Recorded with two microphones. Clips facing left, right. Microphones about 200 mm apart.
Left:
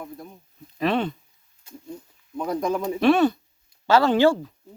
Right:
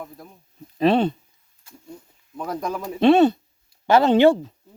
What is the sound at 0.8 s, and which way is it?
Speech, 30° right (ahead or behind).